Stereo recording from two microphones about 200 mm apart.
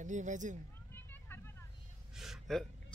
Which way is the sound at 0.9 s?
10° left (ahead or behind).